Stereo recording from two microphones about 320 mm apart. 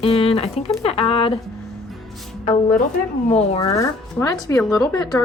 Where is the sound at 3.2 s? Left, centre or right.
Centre.